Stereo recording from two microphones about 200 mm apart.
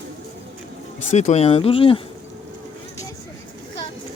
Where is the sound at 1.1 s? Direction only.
35° left (ahead or behind).